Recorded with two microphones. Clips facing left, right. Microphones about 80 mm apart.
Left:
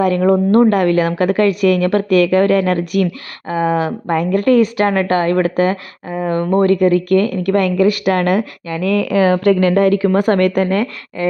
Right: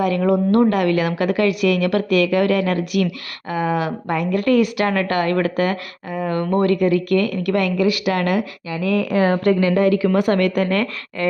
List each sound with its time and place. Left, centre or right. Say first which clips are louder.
0.0 s speech: left 4 dB; left
6.7 s speech: left 5 dB; left
8.8 s speech: left 4 dB; left
9.6 s speech: left 4 dB; left
10.7 s speech: left 3 dB; centre